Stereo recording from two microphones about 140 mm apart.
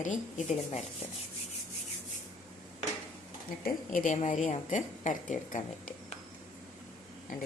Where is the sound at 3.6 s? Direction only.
70° left (ahead or behind).